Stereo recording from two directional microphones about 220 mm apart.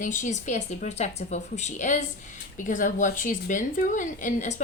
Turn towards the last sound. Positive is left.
turn(degrees=35)  # may be behind; listen again after turning